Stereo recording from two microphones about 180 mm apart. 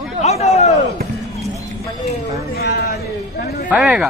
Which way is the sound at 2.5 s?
60° left (ahead or behind).